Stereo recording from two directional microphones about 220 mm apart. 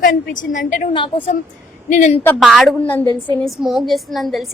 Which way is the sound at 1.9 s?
35° left (ahead or behind).